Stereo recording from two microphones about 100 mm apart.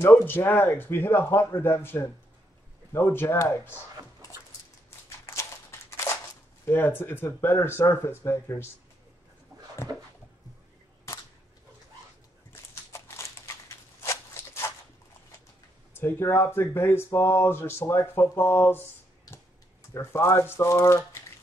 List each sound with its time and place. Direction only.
0.0 s speech: 20° left (ahead or behind)
5.2 s a sound: 25° left (ahead or behind)
6.6 s speech: 20° left (ahead or behind)
12.9 s a sound: 30° left (ahead or behind)
16.0 s speech: 25° left (ahead or behind)
19.9 s speech: 25° left (ahead or behind)